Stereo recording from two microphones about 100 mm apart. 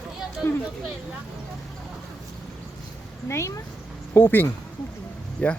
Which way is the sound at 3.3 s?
30° left (ahead or behind).